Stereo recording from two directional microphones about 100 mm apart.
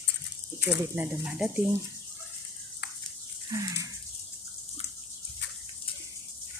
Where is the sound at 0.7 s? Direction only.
30° right (ahead or behind).